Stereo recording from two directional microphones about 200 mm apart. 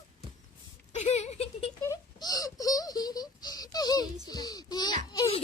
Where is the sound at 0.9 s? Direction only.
35° left (ahead or behind).